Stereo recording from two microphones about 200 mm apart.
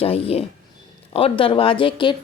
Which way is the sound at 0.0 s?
30° left (ahead or behind).